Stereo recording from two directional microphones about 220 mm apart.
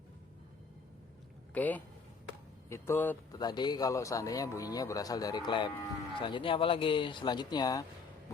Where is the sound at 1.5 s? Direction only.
5° left (ahead or behind).